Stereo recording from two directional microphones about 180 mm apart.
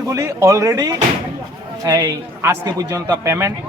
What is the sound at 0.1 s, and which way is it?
A man's voice, 15° right (ahead or behind).